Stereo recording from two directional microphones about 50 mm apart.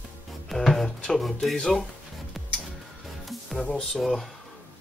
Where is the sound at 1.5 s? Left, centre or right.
Centre.